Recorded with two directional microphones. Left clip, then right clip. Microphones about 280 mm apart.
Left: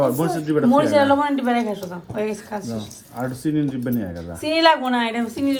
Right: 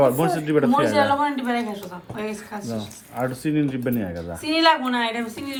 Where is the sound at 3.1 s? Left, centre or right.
Right.